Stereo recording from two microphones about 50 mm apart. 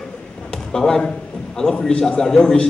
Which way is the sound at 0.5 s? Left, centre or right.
Centre.